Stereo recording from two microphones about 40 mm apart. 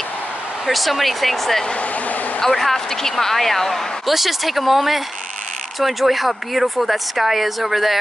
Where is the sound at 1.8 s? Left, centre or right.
Left.